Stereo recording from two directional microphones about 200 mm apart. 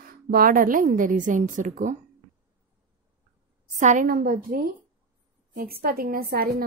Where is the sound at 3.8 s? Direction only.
40° right (ahead or behind).